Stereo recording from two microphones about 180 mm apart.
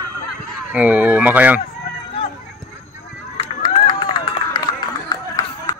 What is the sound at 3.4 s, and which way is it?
Run, 35° left (ahead or behind).